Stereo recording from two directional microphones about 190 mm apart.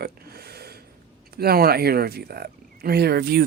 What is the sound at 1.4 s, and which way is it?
Speech, 55° right (ahead or behind).